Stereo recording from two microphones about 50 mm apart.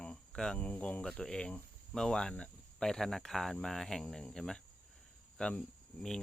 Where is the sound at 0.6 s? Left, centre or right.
Left.